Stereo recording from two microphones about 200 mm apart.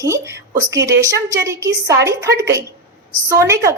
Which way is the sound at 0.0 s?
15° right (ahead or behind).